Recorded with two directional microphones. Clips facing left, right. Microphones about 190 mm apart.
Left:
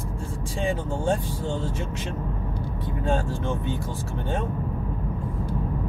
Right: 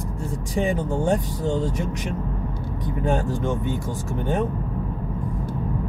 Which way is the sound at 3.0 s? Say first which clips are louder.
Right 3 dB; 15° right (ahead or behind).